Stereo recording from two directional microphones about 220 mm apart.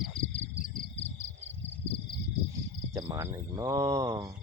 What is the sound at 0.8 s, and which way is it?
Cricket, 50° left (ahead or behind).